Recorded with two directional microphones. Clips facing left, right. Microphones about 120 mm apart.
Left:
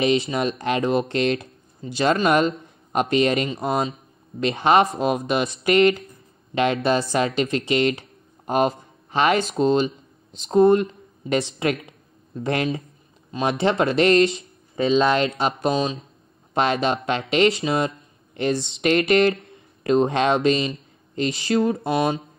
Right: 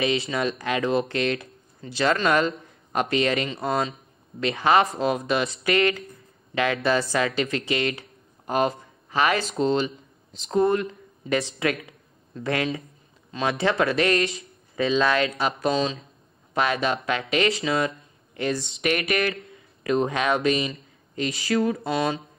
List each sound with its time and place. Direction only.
0.3 s speech: 25° left (ahead or behind)